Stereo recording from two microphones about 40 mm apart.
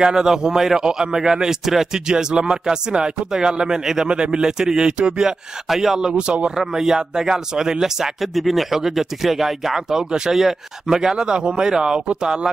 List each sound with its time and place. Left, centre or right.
0.0 s speech: centre
5.7 s speech: centre; by 6.5 s right
6.5 s speech: centre